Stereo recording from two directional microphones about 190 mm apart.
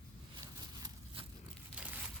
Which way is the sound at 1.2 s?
30° right (ahead or behind).